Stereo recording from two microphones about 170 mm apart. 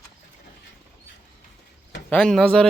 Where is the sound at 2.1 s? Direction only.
5° left (ahead or behind).